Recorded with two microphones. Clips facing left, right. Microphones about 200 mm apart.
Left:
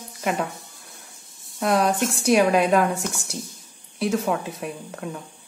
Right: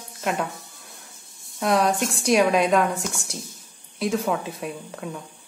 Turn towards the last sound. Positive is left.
turn(degrees=0)  # may be behind; listen again after turning